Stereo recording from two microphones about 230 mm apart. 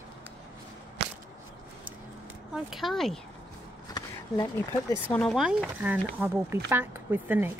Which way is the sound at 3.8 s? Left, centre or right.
Centre.